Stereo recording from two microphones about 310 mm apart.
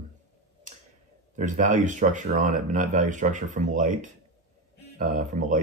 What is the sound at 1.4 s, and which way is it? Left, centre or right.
Speech, right.